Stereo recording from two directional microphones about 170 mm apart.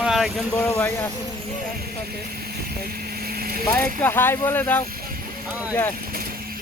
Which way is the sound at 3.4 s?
60° right (ahead or behind).